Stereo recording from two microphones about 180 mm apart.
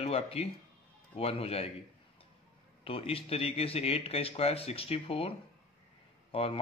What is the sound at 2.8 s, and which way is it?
A man's voice, 30° left (ahead or behind).